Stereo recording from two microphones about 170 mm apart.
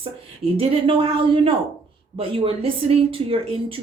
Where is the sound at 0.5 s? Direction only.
35° right (ahead or behind).